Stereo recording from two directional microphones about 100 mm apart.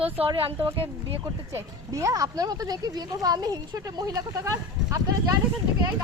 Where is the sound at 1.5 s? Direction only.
30° right (ahead or behind).